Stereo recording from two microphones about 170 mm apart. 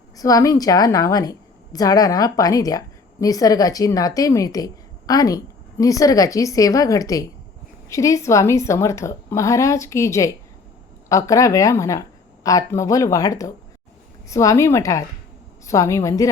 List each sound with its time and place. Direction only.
0.2 s a woman's voice: 20° left (ahead or behind)